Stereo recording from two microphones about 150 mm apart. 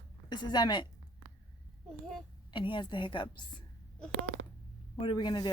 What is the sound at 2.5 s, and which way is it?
A woman's voice, 30° left (ahead or behind).